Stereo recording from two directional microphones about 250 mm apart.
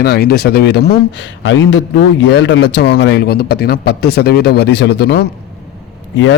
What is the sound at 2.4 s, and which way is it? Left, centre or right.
A man's voice, left.